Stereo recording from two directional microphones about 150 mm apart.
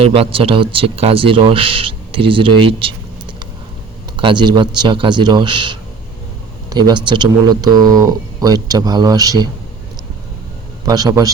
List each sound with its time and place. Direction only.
0.0 s speech: 40° right (ahead or behind)
4.2 s speech: 30° right (ahead or behind)
10.8 s speech: 25° right (ahead or behind)